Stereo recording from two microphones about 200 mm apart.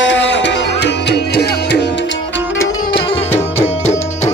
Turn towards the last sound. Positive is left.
turn(degrees=25)  # may be behind; listen again after turning